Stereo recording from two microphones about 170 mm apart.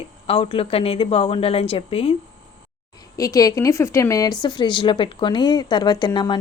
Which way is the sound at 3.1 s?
20° left (ahead or behind).